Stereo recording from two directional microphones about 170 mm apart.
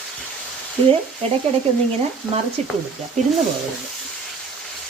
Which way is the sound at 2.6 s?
40° right (ahead or behind).